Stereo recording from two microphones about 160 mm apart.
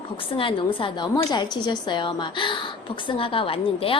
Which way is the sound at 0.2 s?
35° left (ahead or behind).